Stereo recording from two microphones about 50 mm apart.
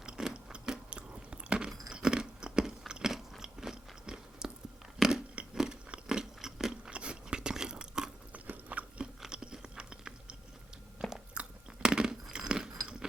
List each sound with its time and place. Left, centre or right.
0.0 s biting: centre
4.9 s a sound: centre
5.9 s biting: centre
6.9 s biting: right
8.3 s biting: right
9.3 s chewing: centre
11.3 s chewing: centre